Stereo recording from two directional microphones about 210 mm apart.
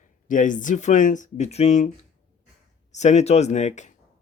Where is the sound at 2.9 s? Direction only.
35° left (ahead or behind).